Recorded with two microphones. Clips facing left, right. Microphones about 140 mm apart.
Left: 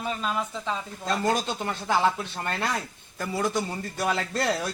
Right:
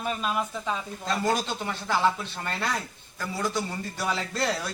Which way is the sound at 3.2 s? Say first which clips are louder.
Left 3 dB; 50° left (ahead or behind).